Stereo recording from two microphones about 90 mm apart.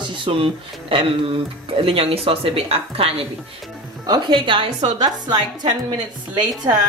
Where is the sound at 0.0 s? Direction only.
65° right (ahead or behind); by 3.1 s 90° right.